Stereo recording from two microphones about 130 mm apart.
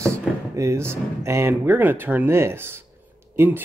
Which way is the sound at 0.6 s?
20° right (ahead or behind).